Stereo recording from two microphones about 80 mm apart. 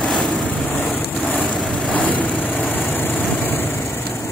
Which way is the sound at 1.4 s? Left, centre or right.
Centre.